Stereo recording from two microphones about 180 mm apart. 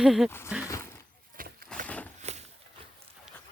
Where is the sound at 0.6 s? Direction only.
15° left (ahead or behind).